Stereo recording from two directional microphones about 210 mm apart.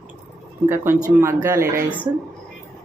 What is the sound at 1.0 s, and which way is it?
Speech, 10° right (ahead or behind).